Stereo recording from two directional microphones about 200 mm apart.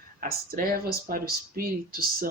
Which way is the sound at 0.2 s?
45° right (ahead or behind).